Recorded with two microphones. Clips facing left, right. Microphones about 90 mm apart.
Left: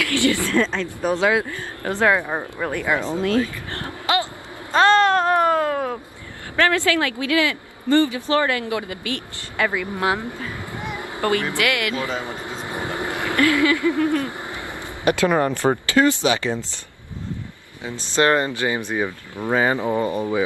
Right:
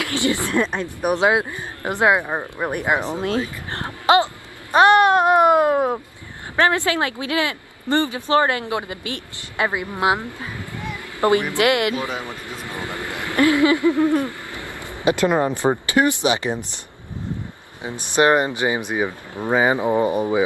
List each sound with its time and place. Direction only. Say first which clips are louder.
0.0 s speech: left 2 dB; 20° right (ahead or behind)
10.8 s a sound: left 2 dB; 20° left (ahead or behind)
11.1 s a woman's voice: right 4 dB; 20° right (ahead or behind)
12.2 s a man's voice: left 2 dB; 20° left (ahead or behind)
13.4 s speech: right 3 dB; 20° right (ahead or behind)
15.0 s speech: even; 15° right (ahead or behind)
17.8 s speech: right 2 dB; 15° right (ahead or behind)